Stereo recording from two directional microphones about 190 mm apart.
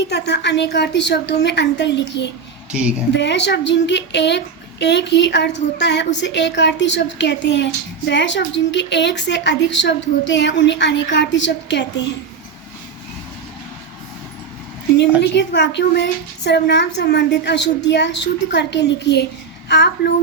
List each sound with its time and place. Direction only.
0.0 s a woman's voice: 65° left (ahead or behind)
14.9 s a woman's voice: 65° left (ahead or behind)